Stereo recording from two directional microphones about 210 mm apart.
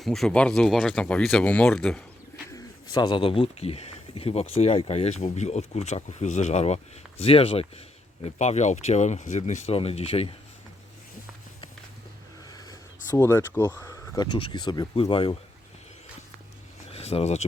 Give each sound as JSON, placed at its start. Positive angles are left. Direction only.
{"t": 0.0, "sound": "speech", "side_deg": 0}
{"t": 2.9, "sound": "speech", "side_deg": 20}
{"t": 12.5, "sound": "a sound", "side_deg": 20}
{"t": 13.1, "sound": "speech", "side_deg": 15}
{"t": 16.9, "sound": "speech", "side_deg": 30}